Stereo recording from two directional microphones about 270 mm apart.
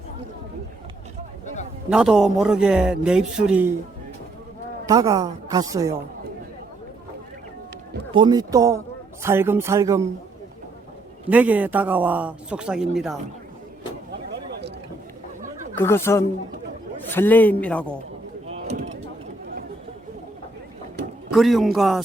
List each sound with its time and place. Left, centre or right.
1.9 s speech: centre
4.9 s a woman's voice: centre
8.1 s a woman's voice: centre
11.3 s speech: centre
15.7 s a man's voice: centre
18.5 s mechanisms: right
21.3 s speech: centre